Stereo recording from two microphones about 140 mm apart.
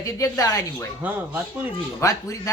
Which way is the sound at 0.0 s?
25° left (ahead or behind).